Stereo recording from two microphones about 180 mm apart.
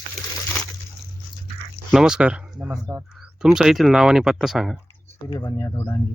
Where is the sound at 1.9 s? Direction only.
5° right (ahead or behind).